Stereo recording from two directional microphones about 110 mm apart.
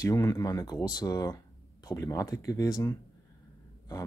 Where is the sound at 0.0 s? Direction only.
30° left (ahead or behind).